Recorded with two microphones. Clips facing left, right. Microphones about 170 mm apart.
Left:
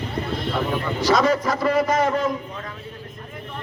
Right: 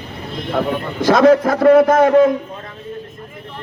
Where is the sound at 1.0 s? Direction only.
55° right (ahead or behind).